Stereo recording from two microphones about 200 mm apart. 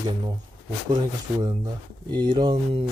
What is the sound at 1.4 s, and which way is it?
Speech, 25° right (ahead or behind).